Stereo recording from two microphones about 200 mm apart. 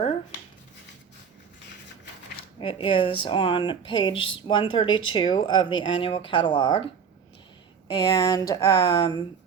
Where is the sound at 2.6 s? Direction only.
25° left (ahead or behind).